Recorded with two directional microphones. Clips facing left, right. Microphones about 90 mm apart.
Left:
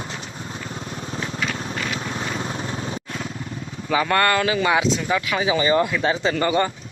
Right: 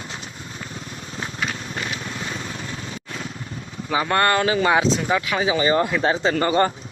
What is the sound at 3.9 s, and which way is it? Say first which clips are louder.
Speech: even; 25° right (ahead or behind).